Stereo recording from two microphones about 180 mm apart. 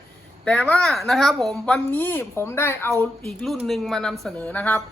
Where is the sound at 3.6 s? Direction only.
Centre (ahead or behind).